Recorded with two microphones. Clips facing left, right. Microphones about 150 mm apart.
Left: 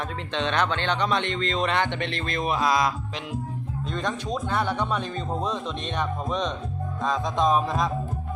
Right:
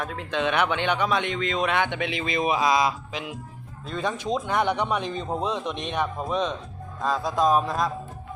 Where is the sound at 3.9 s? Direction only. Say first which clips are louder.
Right 3 dB; 10° right (ahead or behind).